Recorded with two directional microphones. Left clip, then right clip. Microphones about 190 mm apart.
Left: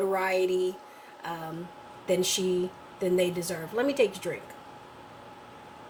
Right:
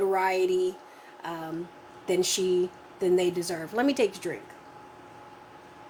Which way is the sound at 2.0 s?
45° right (ahead or behind).